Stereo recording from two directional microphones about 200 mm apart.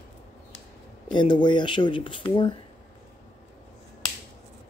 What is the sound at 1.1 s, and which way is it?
Speech, 25° left (ahead or behind).